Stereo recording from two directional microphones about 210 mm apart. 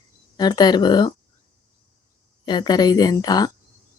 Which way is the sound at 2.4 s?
20° left (ahead or behind).